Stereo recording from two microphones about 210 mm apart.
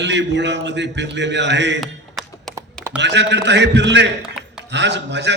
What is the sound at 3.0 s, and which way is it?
A man's voice, 55° right (ahead or behind).